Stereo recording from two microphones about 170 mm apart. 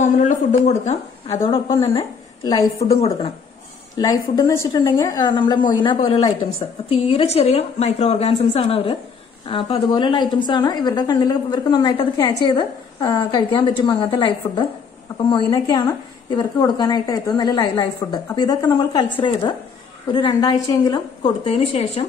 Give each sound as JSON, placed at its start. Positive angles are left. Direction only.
{"t": 0.0, "sound": "a woman's voice", "side_deg": 45}
{"t": 4.0, "sound": "a woman's voice", "side_deg": 20}
{"t": 15.3, "sound": "a woman's voice", "side_deg": 25}